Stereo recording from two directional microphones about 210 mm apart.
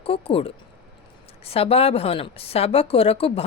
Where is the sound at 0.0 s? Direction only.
25° left (ahead or behind).